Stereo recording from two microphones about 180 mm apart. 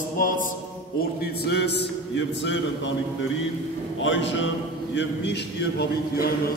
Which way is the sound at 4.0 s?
90° left.